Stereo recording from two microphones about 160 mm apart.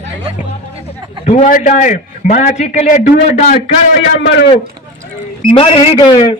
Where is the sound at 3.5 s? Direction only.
35° left (ahead or behind).